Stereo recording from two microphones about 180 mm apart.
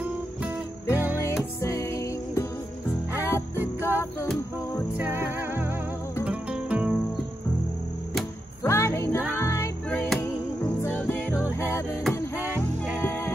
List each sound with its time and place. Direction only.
0.9 s music: 10° right (ahead or behind)
1.6 s music: 15° left (ahead or behind)
4.9 s music: 10° right (ahead or behind)
8.6 s music: 15° left (ahead or behind)
12.4 s music: 10° right (ahead or behind)